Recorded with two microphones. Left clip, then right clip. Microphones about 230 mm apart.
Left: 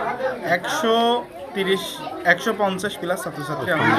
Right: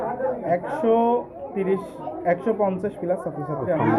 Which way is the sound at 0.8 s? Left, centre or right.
Left.